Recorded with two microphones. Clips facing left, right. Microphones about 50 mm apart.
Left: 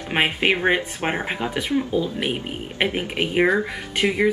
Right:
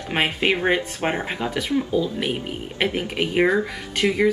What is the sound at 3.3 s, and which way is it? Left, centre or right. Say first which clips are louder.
Speech: even; centre.